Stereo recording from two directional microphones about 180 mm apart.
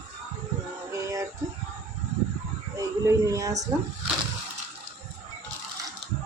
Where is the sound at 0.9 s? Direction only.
15° right (ahead or behind).